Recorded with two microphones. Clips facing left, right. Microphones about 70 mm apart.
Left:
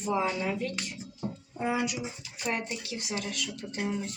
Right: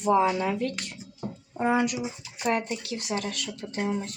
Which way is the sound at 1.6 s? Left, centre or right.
Right.